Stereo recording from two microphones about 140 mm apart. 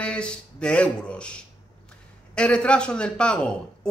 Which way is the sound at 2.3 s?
5° left (ahead or behind).